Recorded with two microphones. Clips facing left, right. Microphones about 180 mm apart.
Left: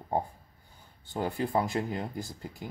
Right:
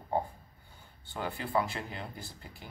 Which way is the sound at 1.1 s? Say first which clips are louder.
Left 5 dB; 40° left (ahead or behind).